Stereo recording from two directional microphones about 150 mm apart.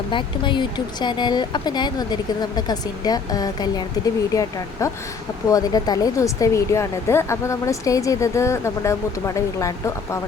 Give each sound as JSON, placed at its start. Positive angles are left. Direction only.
{"t": 0.1, "sound": "speech", "side_deg": 30}